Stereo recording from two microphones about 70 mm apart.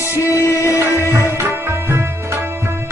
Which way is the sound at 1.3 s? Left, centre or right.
Right.